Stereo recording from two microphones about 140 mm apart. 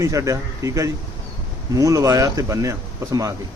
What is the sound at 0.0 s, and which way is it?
A man's voice, 25° right (ahead or behind).